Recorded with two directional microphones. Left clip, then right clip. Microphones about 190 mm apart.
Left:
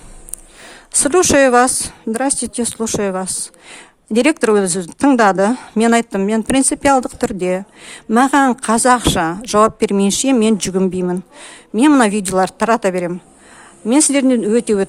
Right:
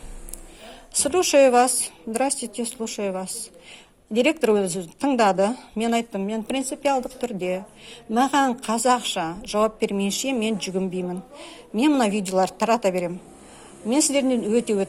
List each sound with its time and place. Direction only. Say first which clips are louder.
0.9 s a woman's voice: left 6 dB; 40° left (ahead or behind)